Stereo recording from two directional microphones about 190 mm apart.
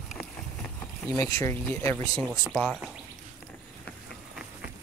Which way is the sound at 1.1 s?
15° left (ahead or behind).